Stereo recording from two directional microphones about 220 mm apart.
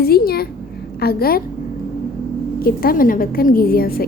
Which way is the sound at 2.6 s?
40° left (ahead or behind).